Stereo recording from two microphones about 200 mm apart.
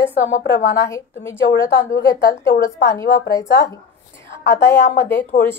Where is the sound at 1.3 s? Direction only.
15° left (ahead or behind).